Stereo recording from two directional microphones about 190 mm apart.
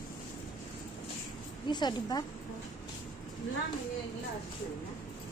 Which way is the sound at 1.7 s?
25° left (ahead or behind).